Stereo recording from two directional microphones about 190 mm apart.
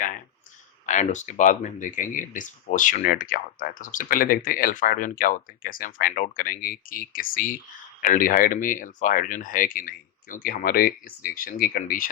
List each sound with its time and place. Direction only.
0.9 s speech: 40° left (ahead or behind)